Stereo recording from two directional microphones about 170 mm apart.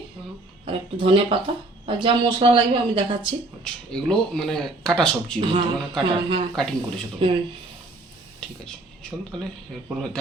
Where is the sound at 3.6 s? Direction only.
5° left (ahead or behind).